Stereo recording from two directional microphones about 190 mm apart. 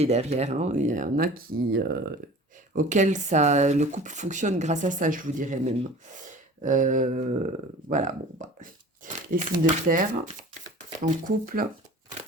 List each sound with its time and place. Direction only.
0.0 s speech: 35° right (ahead or behind); by 2.1 s 55° right (ahead or behind)
2.7 s speech: 40° right (ahead or behind)